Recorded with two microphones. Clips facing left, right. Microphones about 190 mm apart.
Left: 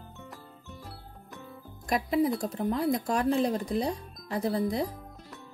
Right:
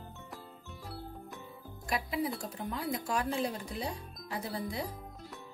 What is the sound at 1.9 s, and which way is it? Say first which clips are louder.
Speech: left 8 dB; 40° left (ahead or behind).